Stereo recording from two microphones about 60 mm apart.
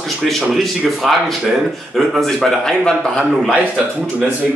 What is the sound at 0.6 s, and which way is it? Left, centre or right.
Speech, centre.